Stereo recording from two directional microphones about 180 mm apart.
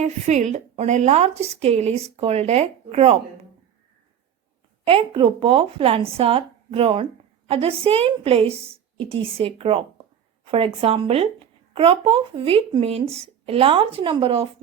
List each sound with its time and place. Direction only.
0.0 s speech: 40° right (ahead or behind)
4.9 s speech: 30° right (ahead or behind)